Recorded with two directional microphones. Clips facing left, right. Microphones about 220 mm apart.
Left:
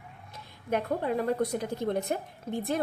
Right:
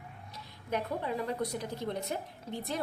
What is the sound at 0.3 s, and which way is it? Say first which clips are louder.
A woman's voice: left 5 dB; 55° left (ahead or behind).